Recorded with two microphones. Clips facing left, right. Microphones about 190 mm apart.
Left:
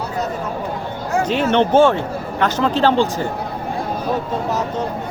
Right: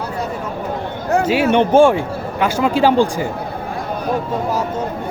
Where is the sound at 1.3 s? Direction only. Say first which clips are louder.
Right 1 dB; 10° right (ahead or behind).